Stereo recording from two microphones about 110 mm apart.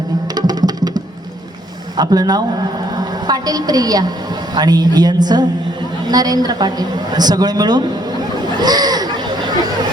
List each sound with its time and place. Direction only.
0.3 s music: 35° right (ahead or behind)
2.0 s a woman's voice: 40° right (ahead or behind)
8.5 s a sound: 40° right (ahead or behind)